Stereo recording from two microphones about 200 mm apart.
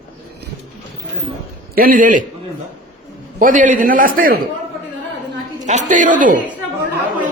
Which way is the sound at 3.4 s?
40° right (ahead or behind).